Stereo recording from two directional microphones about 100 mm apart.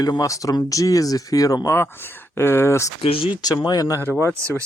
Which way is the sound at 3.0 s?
70° left (ahead or behind).